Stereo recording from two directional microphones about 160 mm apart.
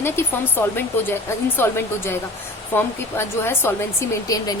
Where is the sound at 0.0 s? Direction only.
15° left (ahead or behind).